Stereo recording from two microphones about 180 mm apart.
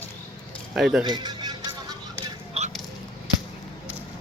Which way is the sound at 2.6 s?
35° right (ahead or behind).